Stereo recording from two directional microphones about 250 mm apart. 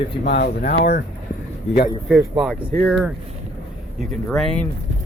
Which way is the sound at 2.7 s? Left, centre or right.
Centre.